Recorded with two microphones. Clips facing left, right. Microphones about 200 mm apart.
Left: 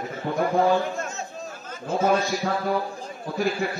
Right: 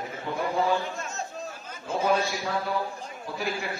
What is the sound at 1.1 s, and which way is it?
Chatter, centre (ahead or behind).